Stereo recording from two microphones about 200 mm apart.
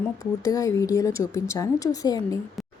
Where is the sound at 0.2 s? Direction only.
15° left (ahead or behind).